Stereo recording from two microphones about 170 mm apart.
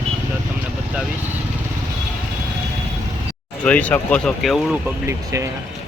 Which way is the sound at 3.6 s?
10° left (ahead or behind).